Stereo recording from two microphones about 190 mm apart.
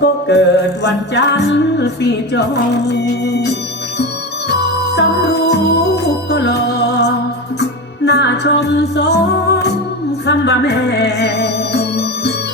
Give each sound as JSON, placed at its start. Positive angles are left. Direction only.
{"t": 0.0, "sound": "music", "side_deg": 60}